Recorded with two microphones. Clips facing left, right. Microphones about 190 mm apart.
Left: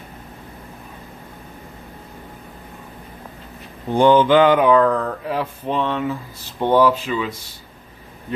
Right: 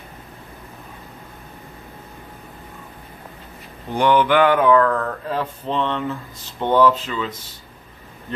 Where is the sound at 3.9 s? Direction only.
25° left (ahead or behind).